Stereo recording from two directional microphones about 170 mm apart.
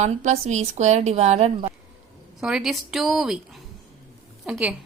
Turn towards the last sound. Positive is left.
turn(degrees=-5)  # may be behind; listen again after turning